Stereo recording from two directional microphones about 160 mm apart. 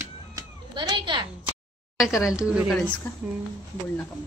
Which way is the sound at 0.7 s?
30° right (ahead or behind).